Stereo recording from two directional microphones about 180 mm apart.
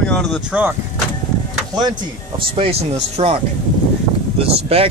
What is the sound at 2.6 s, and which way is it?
Speech, 35° right (ahead or behind).